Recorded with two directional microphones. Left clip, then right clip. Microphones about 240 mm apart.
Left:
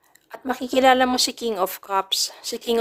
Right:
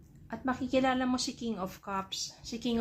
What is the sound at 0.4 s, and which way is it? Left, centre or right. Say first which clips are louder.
A woman's voice: left 12 dB; left.